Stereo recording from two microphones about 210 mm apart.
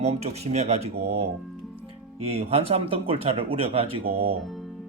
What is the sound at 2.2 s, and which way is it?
Speech, 30° right (ahead or behind).